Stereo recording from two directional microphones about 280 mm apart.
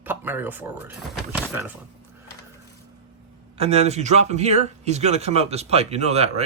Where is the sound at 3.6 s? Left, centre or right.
Right.